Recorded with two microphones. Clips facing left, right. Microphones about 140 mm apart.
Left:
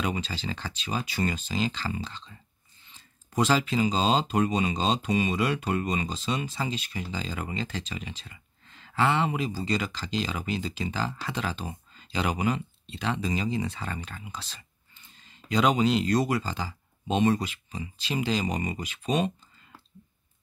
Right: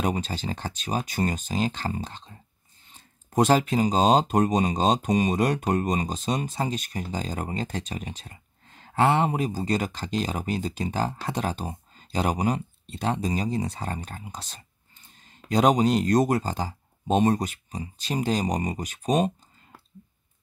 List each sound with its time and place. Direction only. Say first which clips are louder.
0.0 s speech: right 3 dB; 45° right (ahead or behind)